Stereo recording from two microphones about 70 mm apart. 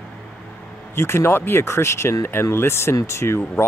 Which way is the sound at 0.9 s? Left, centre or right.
Left.